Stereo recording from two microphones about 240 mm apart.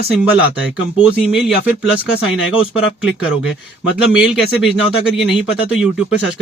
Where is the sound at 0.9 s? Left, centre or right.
Centre.